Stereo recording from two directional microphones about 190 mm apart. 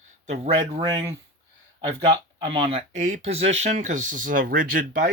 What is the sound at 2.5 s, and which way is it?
Speech, 30° right (ahead or behind).